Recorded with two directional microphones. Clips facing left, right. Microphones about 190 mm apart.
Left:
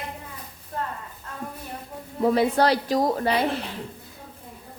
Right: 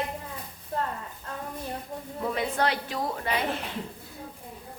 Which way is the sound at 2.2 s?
35° left (ahead or behind).